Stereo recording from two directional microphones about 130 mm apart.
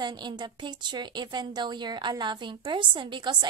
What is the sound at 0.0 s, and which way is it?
A woman's voice, 35° right (ahead or behind).